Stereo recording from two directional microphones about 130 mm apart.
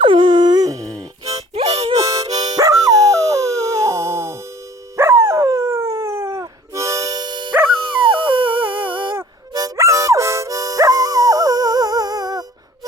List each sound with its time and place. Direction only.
0.0 s dog: 40° right (ahead or behind)
1.5 s harmonica: 50° right (ahead or behind)
2.0 s harmonica: 25° right (ahead or behind)
2.2 s music: 60° right (ahead or behind)
2.6 s dog: 25° right (ahead or behind)
9.6 s music: 25° right (ahead or behind)